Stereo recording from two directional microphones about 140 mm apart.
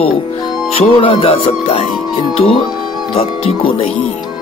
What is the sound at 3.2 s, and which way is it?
Speech, 45° left (ahead or behind).